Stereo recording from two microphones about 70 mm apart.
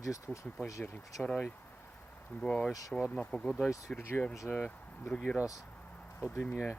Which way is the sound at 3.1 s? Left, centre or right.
Centre.